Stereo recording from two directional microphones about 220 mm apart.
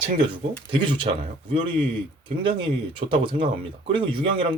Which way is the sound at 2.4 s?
25° right (ahead or behind).